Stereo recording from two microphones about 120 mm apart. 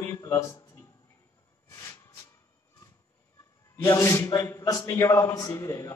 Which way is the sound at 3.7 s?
20° left (ahead or behind).